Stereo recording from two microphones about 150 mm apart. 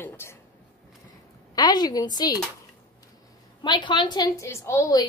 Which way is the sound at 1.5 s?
25° left (ahead or behind).